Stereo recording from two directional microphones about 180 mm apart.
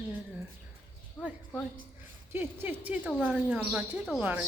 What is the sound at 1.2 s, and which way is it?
Speech, 10° left (ahead or behind).